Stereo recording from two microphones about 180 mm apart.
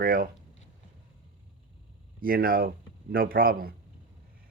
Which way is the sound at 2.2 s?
55° right (ahead or behind).